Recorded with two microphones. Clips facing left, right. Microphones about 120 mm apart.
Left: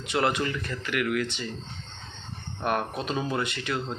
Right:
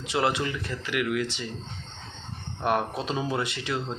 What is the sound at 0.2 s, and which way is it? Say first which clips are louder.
Speech: even; 15° right (ahead or behind).